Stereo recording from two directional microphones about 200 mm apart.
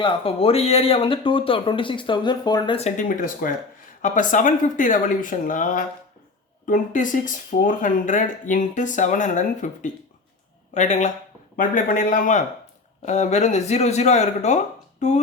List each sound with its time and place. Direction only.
0.0 s speech: 30° left (ahead or behind)